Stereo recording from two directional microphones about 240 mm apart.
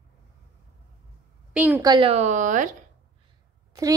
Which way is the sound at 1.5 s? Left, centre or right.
Centre.